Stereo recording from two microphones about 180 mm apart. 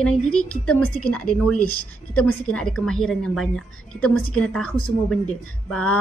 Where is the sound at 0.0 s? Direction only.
5° left (ahead or behind).